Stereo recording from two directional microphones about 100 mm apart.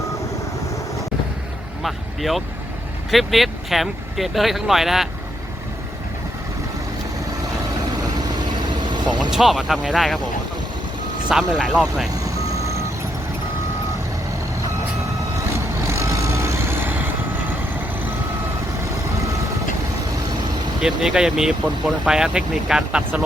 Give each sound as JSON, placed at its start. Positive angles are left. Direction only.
{"t": 1.8, "sound": "speech", "side_deg": 0}
{"t": 9.3, "sound": "speech", "side_deg": -5}
{"t": 11.3, "sound": "speech", "side_deg": -5}
{"t": 15.4, "sound": "vehicle", "side_deg": -30}
{"t": 20.8, "sound": "speech", "side_deg": -5}